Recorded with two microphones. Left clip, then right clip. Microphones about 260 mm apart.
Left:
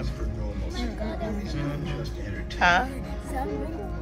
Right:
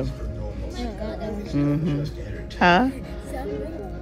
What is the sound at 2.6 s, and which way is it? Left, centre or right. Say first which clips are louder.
Speech: right 3 dB; right.